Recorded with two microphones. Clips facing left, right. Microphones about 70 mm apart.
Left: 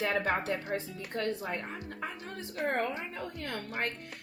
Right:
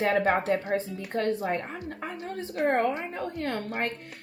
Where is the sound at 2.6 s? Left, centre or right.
Right.